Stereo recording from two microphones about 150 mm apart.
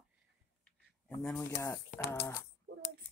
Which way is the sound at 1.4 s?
20° left (ahead or behind).